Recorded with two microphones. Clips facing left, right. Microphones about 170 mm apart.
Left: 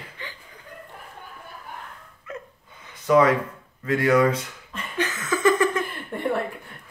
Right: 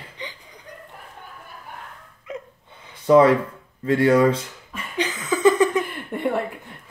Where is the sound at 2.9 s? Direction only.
30° right (ahead or behind).